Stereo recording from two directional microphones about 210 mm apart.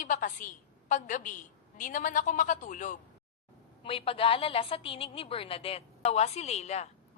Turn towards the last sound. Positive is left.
turn(degrees=30)  # may be behind; listen again after turning